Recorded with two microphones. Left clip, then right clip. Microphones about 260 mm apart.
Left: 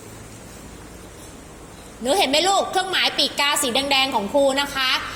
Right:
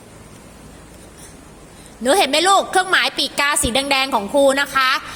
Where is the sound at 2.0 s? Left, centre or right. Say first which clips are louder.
Right 3 dB; right.